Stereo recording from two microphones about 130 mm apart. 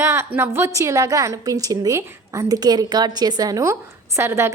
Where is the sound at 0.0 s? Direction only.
20° right (ahead or behind).